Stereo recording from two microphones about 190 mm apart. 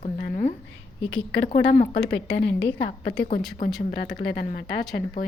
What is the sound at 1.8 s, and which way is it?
A woman's voice, 65° left (ahead or behind).